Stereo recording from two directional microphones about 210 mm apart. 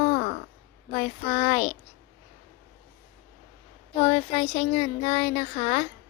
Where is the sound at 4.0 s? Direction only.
25° left (ahead or behind).